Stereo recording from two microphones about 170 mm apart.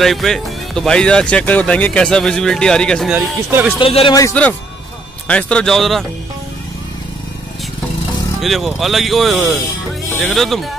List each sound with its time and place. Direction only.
0.0 s speech: centre (ahead or behind)
3.2 s speech: 10° right (ahead or behind)
3.8 s speech: 30° left (ahead or behind)
4.1 s a man's voice: 20° left (ahead or behind)
5.3 s speech: 5° left (ahead or behind)
8.4 s speech: centre (ahead or behind)